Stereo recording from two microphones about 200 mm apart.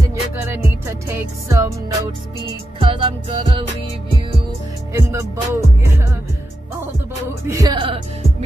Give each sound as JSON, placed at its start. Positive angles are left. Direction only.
{"t": 0.1, "sound": "music", "side_deg": -15}
{"t": 2.8, "sound": "music", "side_deg": -25}
{"t": 4.9, "sound": "music", "side_deg": -15}
{"t": 7.4, "sound": "music", "side_deg": -15}
{"t": 7.8, "sound": "music", "side_deg": -25}